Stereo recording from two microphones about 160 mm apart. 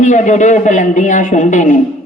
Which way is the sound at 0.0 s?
50° left (ahead or behind).